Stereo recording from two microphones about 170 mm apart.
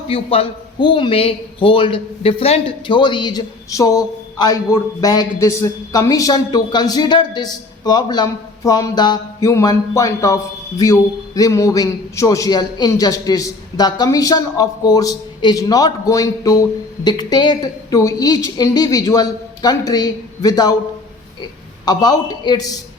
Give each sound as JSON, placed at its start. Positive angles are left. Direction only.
{"t": 0.1, "sound": "a man's voice", "side_deg": 35}
{"t": 21.8, "sound": "a man's voice", "side_deg": 25}